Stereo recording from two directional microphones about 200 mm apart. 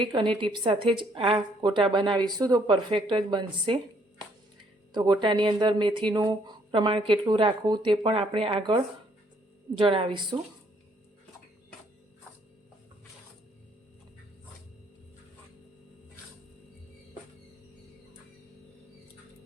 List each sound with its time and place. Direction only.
0.0 s speech: 25° right (ahead or behind)
4.9 s speech: 20° right (ahead or behind)